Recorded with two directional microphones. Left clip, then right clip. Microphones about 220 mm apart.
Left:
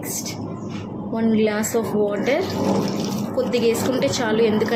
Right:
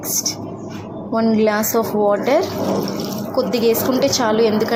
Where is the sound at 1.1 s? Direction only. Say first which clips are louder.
Right 4 dB; 5° right (ahead or behind).